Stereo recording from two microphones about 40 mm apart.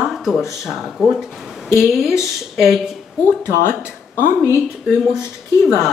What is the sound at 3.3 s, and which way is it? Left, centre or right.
Speech, left.